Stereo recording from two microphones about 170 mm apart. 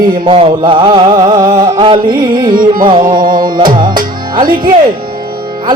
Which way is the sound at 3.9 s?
55° right (ahead or behind).